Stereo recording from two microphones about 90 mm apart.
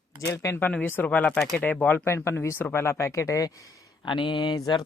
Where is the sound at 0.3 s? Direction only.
40° left (ahead or behind).